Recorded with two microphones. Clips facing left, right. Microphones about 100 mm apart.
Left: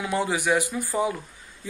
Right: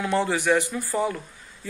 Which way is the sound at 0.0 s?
15° left (ahead or behind).